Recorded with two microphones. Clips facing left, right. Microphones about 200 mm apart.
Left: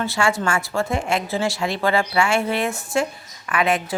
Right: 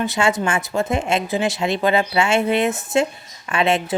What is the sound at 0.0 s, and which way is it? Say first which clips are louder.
A woman's voice: right 2 dB; 20° right (ahead or behind).